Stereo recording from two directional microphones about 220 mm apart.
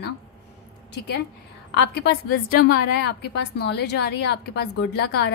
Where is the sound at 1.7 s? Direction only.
50° left (ahead or behind).